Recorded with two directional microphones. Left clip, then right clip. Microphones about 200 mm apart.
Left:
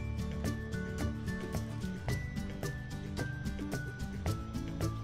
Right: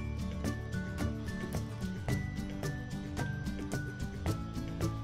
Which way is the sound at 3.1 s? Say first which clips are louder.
Even; centre (ahead or behind).